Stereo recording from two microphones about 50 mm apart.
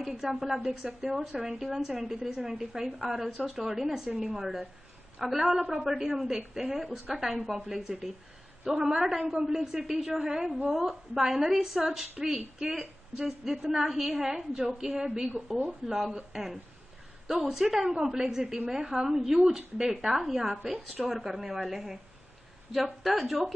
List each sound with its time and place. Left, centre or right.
0.0 s speech: centre
0.7 s a woman's voice: right
1.1 s a woman's voice: centre
20.6 s a woman's voice: right
21.0 s speech: centre
23.0 s speech: centre